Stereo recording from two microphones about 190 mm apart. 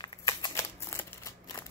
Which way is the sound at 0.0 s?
20° left (ahead or behind).